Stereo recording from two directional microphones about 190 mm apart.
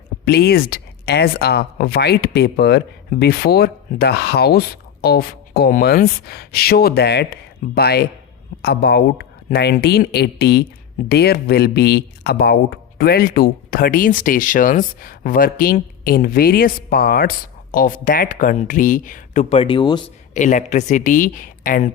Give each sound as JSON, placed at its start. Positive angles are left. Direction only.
{"t": 0.3, "sound": "a man's voice", "side_deg": 55}
{"t": 20.3, "sound": "speech", "side_deg": 40}